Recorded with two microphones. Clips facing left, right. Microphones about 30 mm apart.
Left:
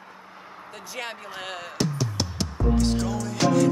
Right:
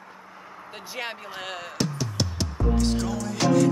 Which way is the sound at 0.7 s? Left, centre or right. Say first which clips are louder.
Right 1 dB; centre.